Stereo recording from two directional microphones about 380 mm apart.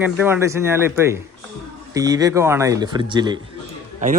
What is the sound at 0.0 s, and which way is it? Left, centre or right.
A man's voice, centre.